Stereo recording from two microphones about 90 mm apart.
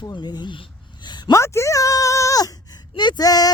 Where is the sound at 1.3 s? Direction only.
30° left (ahead or behind).